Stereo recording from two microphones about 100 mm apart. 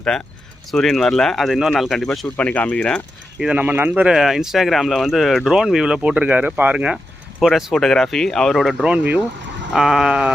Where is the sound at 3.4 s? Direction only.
15° right (ahead or behind).